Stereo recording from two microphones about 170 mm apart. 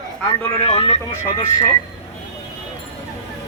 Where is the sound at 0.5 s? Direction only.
35° left (ahead or behind).